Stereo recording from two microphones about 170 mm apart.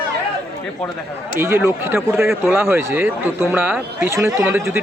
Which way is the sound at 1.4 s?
15° right (ahead or behind).